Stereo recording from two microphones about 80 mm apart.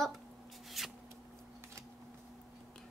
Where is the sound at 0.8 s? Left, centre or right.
Centre.